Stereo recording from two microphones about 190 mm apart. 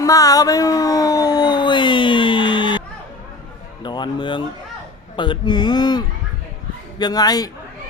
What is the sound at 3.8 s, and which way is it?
Speech, 25° left (ahead or behind).